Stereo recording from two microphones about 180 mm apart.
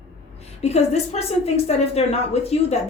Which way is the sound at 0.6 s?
35° left (ahead or behind).